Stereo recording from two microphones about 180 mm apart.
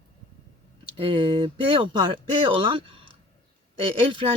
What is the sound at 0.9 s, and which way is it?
Speech, 30° right (ahead or behind).